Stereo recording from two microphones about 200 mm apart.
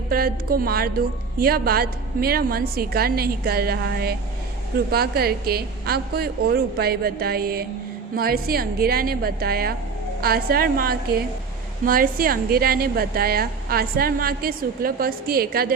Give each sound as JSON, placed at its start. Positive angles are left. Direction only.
{"t": 0.1, "sound": "a woman's voice", "side_deg": -45}